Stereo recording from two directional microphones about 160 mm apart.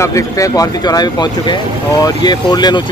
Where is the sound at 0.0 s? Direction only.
20° left (ahead or behind).